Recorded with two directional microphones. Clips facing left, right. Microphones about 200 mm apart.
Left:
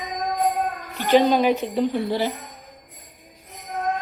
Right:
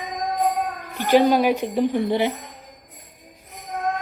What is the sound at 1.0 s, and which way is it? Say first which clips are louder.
A woman's voice: right 1 dB; 10° right (ahead or behind).